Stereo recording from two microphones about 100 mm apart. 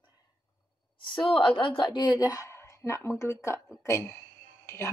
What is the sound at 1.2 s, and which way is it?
A woman's voice, 55° left (ahead or behind).